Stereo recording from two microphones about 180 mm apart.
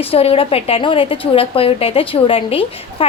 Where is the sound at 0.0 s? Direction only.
35° left (ahead or behind).